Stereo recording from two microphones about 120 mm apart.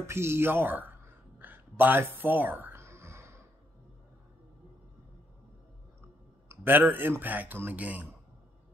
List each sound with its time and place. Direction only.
0.0 s speech: 20° right (ahead or behind)
1.4 s a sound: 15° right (ahead or behind)
6.5 s speech: 15° right (ahead or behind)